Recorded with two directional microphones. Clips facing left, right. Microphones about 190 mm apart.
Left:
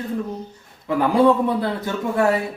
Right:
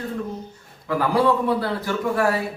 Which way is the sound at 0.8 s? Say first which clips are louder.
Left 4 dB; 20° left (ahead or behind).